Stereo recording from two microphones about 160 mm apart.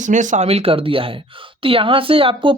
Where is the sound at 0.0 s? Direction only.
50° right (ahead or behind).